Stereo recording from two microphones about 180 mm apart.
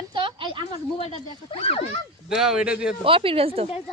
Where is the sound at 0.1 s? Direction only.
30° right (ahead or behind).